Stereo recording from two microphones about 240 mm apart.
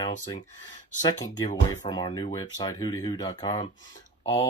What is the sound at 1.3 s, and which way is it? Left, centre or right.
Speech, centre.